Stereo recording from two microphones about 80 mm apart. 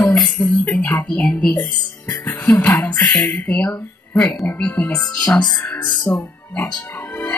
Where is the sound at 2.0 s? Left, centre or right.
Left.